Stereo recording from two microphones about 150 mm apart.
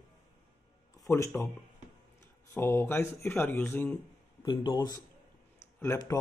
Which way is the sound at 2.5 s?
15° left (ahead or behind).